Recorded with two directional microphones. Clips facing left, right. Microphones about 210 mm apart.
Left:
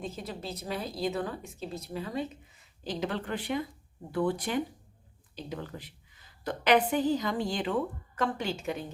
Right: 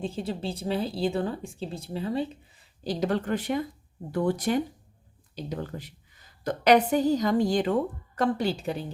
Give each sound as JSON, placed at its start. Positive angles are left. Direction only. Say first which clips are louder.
{"t": 0.0, "sound": "a woman's voice", "louder": "right 7 dB", "side_deg": -30}